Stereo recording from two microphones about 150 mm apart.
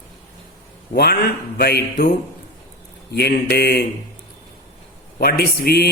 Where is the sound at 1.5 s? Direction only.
90° left.